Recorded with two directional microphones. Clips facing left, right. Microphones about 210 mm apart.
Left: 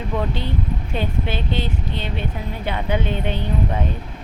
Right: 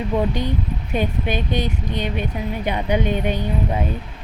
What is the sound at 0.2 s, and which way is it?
Speech, 15° right (ahead or behind).